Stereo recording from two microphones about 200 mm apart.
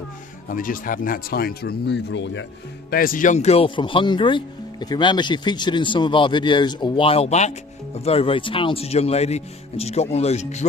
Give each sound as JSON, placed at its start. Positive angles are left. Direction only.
{"t": 0.4, "sound": "speech", "side_deg": 45}
{"t": 2.9, "sound": "speech", "side_deg": 45}